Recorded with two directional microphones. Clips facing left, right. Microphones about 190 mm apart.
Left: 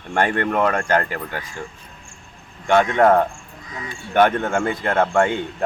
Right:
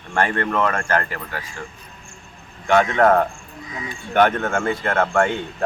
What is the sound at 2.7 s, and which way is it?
A man's voice, 15° left (ahead or behind).